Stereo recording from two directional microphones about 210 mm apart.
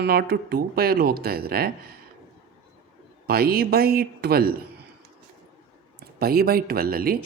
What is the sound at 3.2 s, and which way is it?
Speech, 45° right (ahead or behind).